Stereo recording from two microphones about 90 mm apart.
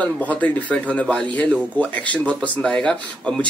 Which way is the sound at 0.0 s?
15° left (ahead or behind).